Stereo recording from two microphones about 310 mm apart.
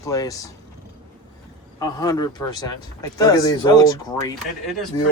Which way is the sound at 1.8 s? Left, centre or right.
Centre.